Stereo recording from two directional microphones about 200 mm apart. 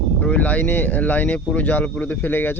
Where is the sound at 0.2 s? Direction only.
5° left (ahead or behind).